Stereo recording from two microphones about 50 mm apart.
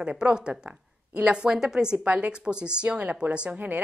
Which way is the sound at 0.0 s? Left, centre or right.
Right.